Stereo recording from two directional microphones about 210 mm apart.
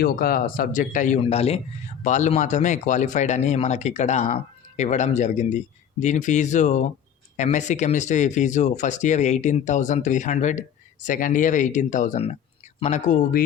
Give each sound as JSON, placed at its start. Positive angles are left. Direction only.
{"t": 0.0, "sound": "speech", "side_deg": 45}